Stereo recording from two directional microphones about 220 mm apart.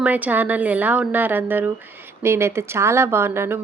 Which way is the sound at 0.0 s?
5° right (ahead or behind).